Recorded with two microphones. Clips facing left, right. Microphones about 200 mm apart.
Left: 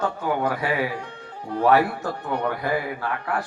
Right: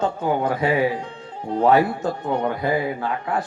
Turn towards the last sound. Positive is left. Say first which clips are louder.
# right 3 dB
turn(degrees=-20)  # may be behind; listen again after turning